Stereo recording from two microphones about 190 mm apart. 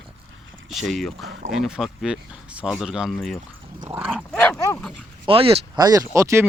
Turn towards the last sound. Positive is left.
turn(degrees=-15)  # may be behind; listen again after turning